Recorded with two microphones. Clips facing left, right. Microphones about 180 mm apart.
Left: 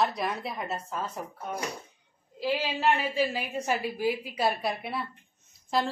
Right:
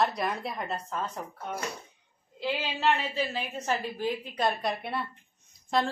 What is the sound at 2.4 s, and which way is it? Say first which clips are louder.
A woman's voice: left 2 dB; 10° left (ahead or behind).